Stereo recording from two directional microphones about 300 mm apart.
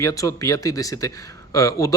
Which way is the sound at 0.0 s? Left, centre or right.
Centre.